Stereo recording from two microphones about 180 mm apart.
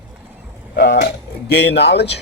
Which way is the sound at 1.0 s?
70° left (ahead or behind).